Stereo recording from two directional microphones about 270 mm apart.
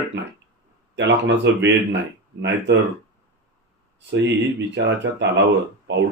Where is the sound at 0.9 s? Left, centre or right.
Right.